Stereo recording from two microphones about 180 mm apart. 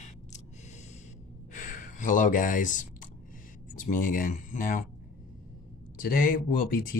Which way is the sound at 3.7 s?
45° left (ahead or behind).